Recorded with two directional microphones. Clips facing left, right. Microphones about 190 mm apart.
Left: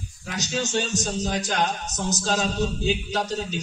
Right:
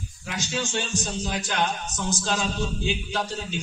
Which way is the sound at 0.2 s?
40° left (ahead or behind).